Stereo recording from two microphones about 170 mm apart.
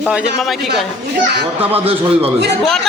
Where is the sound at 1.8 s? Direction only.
35° right (ahead or behind).